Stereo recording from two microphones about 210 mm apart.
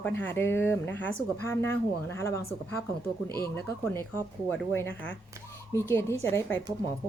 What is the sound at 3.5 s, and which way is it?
Speech, 10° left (ahead or behind).